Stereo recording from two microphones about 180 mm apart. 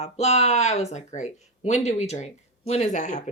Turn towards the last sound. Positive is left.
turn(degrees=40)  # may be behind; listen again after turning